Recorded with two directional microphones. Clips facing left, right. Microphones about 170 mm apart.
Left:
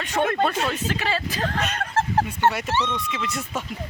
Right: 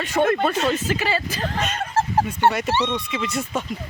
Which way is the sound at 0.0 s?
Centre (ahead or behind).